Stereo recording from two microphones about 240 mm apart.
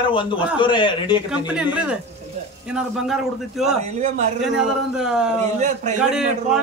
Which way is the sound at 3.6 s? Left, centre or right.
Right.